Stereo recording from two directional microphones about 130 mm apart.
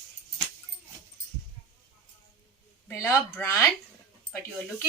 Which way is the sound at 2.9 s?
20° left (ahead or behind).